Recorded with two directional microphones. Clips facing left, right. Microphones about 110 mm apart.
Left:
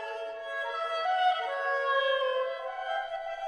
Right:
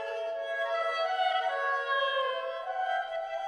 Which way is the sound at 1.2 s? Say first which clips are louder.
Left 1 dB; 30° left (ahead or behind).